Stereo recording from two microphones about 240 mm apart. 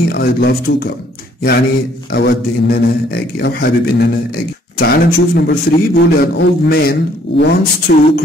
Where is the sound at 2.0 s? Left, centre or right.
Left.